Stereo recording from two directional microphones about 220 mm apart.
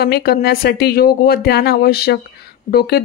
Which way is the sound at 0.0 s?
45° left (ahead or behind).